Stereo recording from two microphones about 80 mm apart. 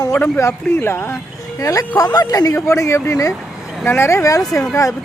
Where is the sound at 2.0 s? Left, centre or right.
Left.